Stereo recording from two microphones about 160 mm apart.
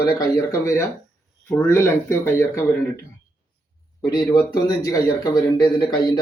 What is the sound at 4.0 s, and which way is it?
A man's voice, 25° left (ahead or behind).